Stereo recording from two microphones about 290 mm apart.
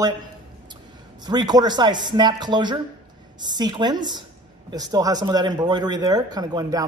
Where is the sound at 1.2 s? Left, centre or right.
Centre.